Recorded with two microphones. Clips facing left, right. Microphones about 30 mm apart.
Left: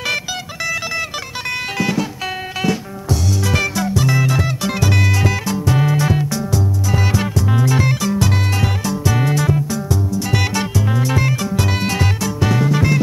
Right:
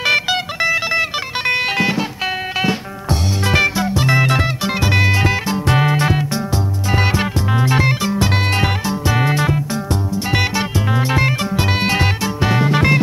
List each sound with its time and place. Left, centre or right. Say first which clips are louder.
0.0 s music: right 6 dB; right
11.0 s music: right 3 dB; right